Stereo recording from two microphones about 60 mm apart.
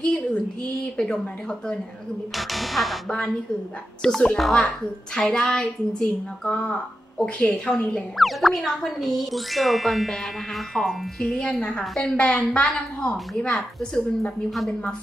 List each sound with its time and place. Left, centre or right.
0.0 s a sound: centre
0.9 s a woman's voice: centre
2.3 s speech: centre
4.0 s a woman's voice: centre
5.2 s a woman's voice: centre
8.2 s a woman's voice: centre; by 13.2 s left
13.6 s speech: centre